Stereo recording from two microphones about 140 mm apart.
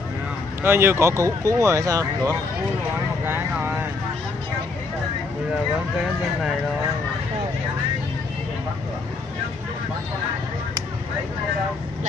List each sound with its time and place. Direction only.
0.6 s speech: 15° right (ahead or behind)